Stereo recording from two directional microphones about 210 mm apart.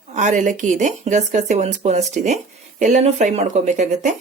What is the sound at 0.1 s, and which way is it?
Speech, 35° right (ahead or behind).